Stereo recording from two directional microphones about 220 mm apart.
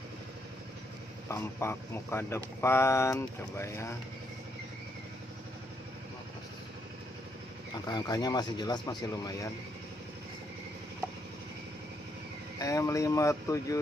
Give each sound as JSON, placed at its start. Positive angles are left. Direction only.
{"t": 1.3, "sound": "speech", "side_deg": 10}
{"t": 7.8, "sound": "speech", "side_deg": 15}
{"t": 12.5, "sound": "speech", "side_deg": 15}